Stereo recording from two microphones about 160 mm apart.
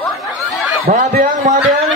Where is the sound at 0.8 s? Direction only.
65° right (ahead or behind).